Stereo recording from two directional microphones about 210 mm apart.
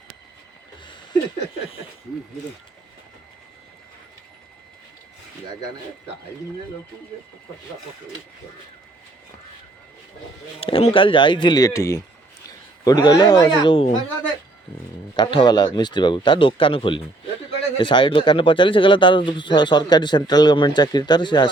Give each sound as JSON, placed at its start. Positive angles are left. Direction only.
{"t": 10.6, "sound": "speech", "side_deg": 25}
{"t": 15.1, "sound": "speech", "side_deg": 20}